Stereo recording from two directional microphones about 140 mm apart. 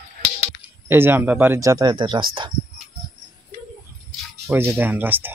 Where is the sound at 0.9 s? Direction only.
15° right (ahead or behind).